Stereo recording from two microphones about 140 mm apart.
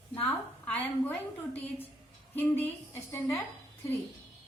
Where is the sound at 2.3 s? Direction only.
15° left (ahead or behind).